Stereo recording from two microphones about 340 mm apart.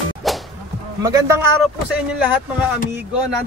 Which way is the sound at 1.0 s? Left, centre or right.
Centre.